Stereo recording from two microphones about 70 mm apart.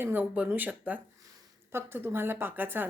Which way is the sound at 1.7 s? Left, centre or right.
Right.